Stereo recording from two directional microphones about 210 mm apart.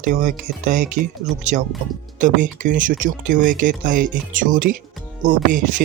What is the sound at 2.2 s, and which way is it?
Speech, 40° right (ahead or behind).